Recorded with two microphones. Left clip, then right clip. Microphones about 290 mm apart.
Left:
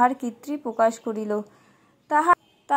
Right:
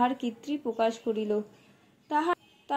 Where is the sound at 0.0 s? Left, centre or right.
Centre.